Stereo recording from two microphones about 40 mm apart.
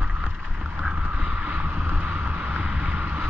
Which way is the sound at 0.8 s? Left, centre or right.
Centre.